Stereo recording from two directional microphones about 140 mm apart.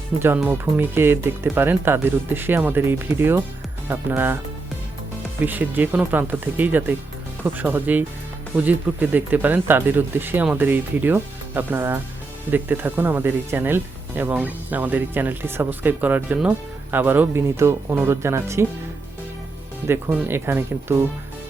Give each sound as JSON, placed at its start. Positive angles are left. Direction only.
{"t": 0.1, "sound": "speech", "side_deg": -5}
{"t": 5.4, "sound": "speech", "side_deg": -15}
{"t": 19.9, "sound": "speech", "side_deg": -15}